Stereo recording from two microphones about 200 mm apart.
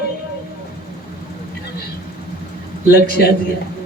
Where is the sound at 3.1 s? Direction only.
50° left (ahead or behind).